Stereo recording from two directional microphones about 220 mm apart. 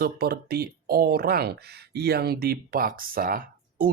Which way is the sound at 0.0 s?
45° right (ahead or behind).